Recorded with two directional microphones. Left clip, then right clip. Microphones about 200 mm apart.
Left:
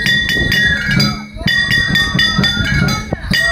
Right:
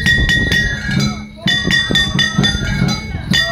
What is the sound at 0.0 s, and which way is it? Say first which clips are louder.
Cowbell: even; 30° left (ahead or behind).